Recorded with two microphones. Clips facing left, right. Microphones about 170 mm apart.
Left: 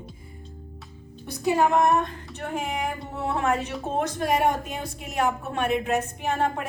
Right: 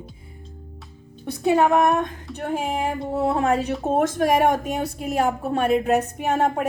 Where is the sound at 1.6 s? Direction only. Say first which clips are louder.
Right 2 dB; 60° right (ahead or behind).